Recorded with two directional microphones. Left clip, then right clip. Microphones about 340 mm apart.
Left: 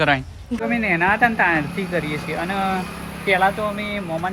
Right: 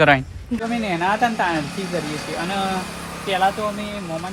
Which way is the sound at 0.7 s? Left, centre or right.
Centre.